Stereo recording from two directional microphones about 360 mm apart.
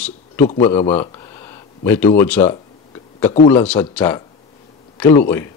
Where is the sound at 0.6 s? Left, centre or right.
Centre.